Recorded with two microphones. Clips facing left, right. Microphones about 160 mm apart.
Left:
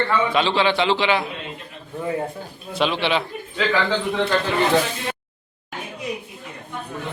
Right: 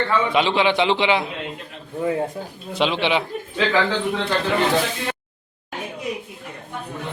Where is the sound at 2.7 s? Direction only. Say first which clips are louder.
Right 1 dB; 20° right (ahead or behind).